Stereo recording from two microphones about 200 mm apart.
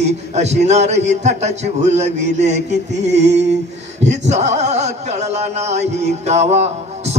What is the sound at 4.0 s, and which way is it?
A man's voice, 35° right (ahead or behind).